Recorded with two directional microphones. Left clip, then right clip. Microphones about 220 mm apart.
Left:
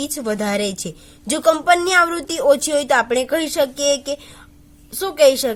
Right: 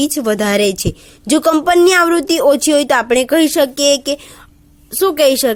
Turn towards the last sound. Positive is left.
turn(degrees=-35)  # may be behind; listen again after turning